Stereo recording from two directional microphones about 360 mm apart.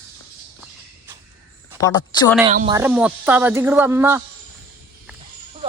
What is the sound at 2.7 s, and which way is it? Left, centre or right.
Speech, centre.